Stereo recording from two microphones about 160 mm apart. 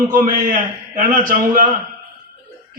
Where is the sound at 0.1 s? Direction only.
55° right (ahead or behind).